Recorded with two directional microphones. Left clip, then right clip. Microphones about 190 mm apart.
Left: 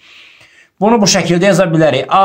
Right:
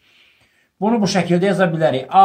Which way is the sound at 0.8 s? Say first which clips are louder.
Left 8 dB; 35° left (ahead or behind).